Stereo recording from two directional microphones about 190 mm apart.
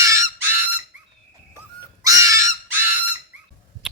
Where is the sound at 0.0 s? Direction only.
15° right (ahead or behind).